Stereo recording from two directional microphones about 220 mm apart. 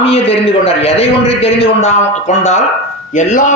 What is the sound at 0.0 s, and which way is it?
A man's voice, 25° left (ahead or behind).